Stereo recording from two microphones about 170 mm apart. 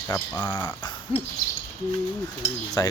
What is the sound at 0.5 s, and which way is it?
Cricket, 25° left (ahead or behind).